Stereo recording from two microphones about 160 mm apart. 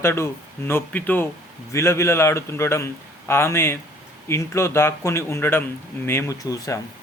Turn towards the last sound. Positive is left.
turn(degrees=20)  # may be behind; listen again after turning